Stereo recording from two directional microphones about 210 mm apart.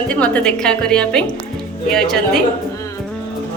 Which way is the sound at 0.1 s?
5° left (ahead or behind).